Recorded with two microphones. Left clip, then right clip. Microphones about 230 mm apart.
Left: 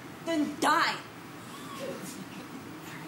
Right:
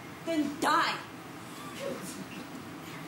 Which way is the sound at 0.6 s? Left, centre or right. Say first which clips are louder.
Left 2 dB; centre.